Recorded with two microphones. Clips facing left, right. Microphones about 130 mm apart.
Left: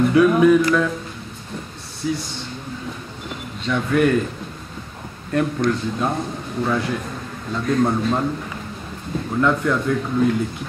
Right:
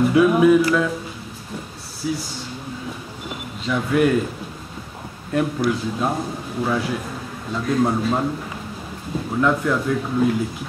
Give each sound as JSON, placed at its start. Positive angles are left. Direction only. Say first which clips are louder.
{"t": 0.0, "sound": "a man's voice", "louder": "left 1 dB", "side_deg": -5}
{"t": 2.0, "sound": "a man's voice", "louder": "left 1 dB", "side_deg": -5}
{"t": 3.6, "sound": "a man's voice", "louder": "even", "side_deg": -5}
{"t": 5.3, "sound": "a man's voice", "louder": "left 1 dB", "side_deg": -5}
{"t": 9.4, "sound": "a man's voice", "louder": "even", "side_deg": -5}